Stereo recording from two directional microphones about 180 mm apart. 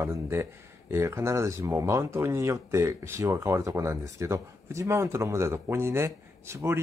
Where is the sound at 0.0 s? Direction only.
15° right (ahead or behind).